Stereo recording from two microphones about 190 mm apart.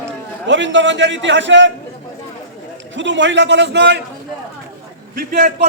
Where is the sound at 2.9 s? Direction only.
70° right (ahead or behind).